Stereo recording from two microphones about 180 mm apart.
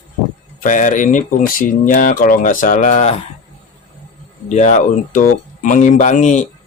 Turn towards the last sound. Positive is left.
turn(degrees=45)  # may be behind; listen again after turning